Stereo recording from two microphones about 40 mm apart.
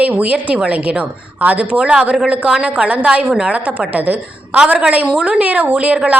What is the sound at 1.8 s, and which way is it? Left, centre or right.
A woman's voice, right.